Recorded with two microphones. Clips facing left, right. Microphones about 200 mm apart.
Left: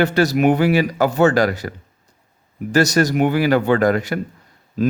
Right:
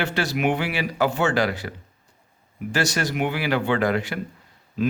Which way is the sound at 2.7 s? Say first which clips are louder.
Left 9 dB; 40° left (ahead or behind).